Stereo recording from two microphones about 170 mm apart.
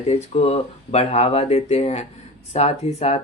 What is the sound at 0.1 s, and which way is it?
Speech, 40° left (ahead or behind).